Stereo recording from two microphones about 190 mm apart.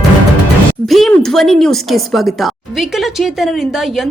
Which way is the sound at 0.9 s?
Centre (ahead or behind).